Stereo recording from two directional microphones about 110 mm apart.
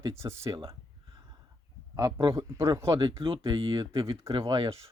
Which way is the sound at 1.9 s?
30° right (ahead or behind).